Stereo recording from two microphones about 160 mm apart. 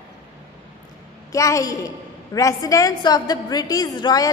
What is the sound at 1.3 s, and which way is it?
A woman's voice, 20° left (ahead or behind).